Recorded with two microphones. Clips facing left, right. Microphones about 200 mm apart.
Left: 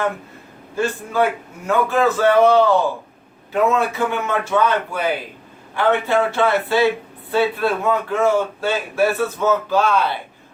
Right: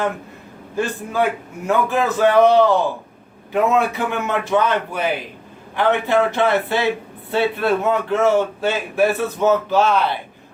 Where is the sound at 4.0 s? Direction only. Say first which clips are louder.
Left 1 dB; 20° right (ahead or behind).